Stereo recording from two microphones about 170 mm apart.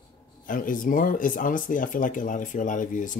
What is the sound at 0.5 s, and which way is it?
Speech, 55° left (ahead or behind).